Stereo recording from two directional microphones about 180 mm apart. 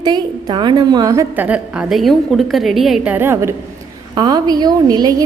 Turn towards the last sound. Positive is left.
turn(degrees=-20)  # may be behind; listen again after turning